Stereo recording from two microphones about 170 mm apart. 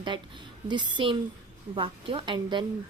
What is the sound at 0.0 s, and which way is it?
A woman's voice, 25° right (ahead or behind).